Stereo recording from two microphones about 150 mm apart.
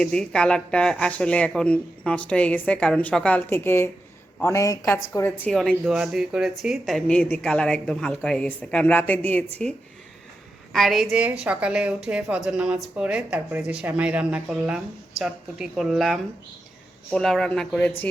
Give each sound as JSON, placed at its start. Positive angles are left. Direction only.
{"t": 0.0, "sound": "a woman's voice", "side_deg": 5}
{"t": 5.5, "sound": "speech", "side_deg": 5}